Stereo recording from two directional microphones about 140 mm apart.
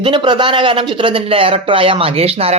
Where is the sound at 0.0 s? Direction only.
35° right (ahead or behind).